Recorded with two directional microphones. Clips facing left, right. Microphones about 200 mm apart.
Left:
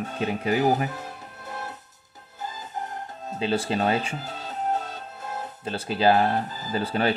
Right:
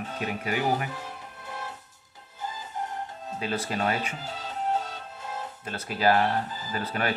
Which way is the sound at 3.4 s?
30° left (ahead or behind).